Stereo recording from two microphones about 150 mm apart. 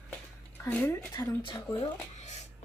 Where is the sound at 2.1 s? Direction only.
50° left (ahead or behind).